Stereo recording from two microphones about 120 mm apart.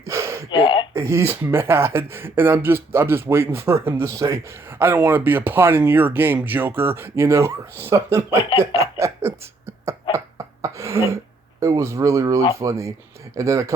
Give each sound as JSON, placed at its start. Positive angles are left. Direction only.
{"t": 0.0, "sound": "a sound", "side_deg": -25}
{"t": 0.5, "sound": "speech", "side_deg": 45}
{"t": 0.9, "sound": "speech", "side_deg": -20}
{"t": 8.5, "sound": "cough", "side_deg": -25}
{"t": 11.6, "sound": "speech", "side_deg": -25}